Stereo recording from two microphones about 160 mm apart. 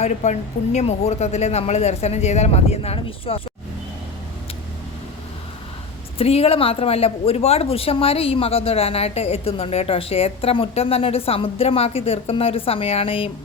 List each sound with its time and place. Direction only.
0.0 s speech: 50° left (ahead or behind)
6.1 s speech: 40° left (ahead or behind)